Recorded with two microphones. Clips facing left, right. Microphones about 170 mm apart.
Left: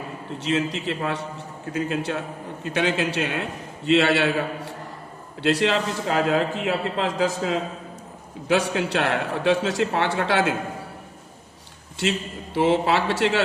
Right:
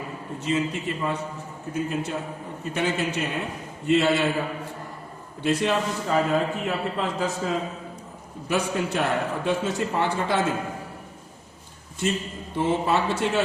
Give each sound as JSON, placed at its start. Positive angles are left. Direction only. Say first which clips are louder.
{"t": 0.3, "sound": "a man's voice", "louder": "left 1 dB", "side_deg": 90}
{"t": 12.5, "sound": "a man's voice", "louder": "left 3 dB", "side_deg": 90}